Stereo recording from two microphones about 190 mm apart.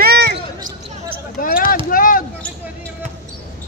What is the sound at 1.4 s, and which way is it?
Basketball bounce, 45° left (ahead or behind).